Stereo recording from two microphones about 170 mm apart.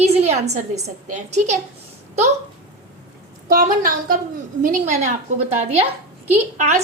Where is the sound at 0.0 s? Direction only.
40° right (ahead or behind).